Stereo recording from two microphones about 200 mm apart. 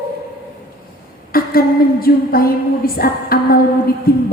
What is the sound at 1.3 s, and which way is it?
A woman's voice, 50° left (ahead or behind).